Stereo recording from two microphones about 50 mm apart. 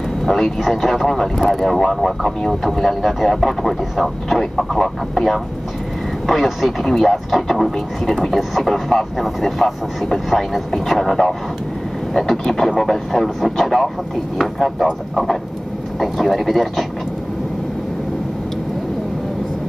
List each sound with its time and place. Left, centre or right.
0.2 s speech: centre
16.0 s speech: centre